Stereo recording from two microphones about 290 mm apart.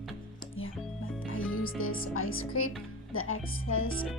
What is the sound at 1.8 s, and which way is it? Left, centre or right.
Speech, left.